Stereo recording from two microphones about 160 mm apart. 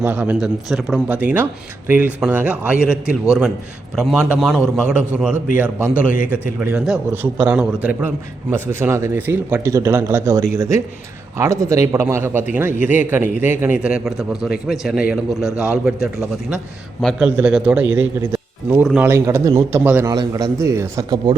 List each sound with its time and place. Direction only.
0.0 s a man's voice: 10° right (ahead or behind)
17.2 s a man's voice: 10° right (ahead or behind)